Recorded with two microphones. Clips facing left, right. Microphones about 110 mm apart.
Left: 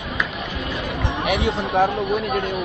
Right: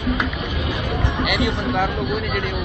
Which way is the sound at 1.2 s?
35° left (ahead or behind).